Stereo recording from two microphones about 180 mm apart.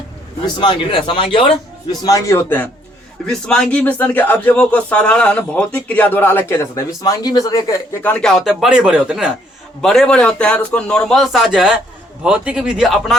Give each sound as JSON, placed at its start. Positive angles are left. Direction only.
{"t": 0.4, "sound": "a man's voice", "side_deg": 25}